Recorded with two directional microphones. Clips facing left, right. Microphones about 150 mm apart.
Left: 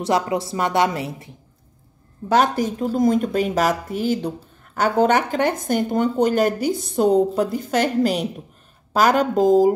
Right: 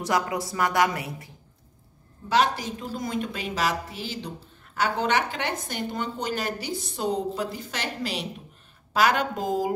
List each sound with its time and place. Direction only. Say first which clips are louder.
0.0 s a woman's voice: left 5 dB; 25° left (ahead or behind)
2.2 s a woman's voice: left 5 dB; 50° left (ahead or behind)